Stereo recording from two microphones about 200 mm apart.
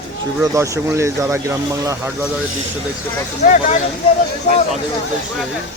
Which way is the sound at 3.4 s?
40° left (ahead or behind).